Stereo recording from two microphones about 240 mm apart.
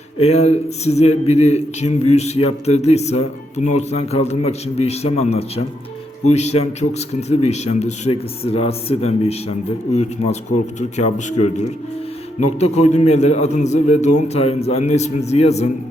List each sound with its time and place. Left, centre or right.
0.2 s speech: left